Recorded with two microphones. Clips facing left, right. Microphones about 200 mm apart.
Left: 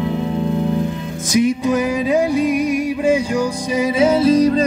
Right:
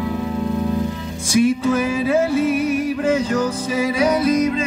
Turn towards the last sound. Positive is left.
turn(degrees=35)  # may be behind; listen again after turning